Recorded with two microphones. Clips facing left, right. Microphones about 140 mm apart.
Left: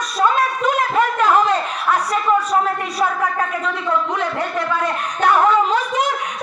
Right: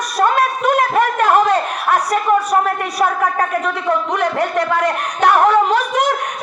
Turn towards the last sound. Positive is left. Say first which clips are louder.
# right 3 dB
turn(degrees=-70)  # may be behind; listen again after turning